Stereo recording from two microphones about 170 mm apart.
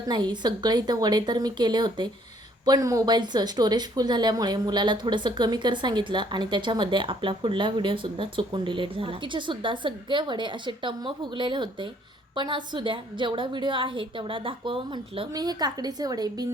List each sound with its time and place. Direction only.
0.1 s speech: 25° right (ahead or behind)